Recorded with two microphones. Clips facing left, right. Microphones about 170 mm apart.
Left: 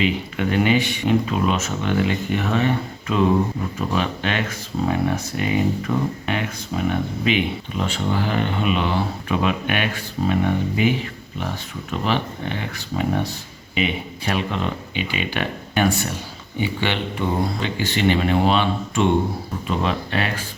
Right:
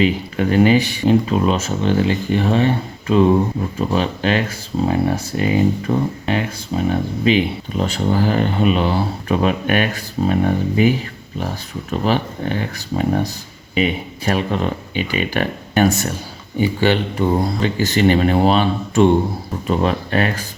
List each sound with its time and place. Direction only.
0.0 s speech: 35° right (ahead or behind)